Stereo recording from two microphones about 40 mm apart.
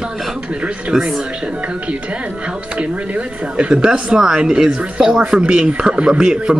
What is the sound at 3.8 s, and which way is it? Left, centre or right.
Speech, centre.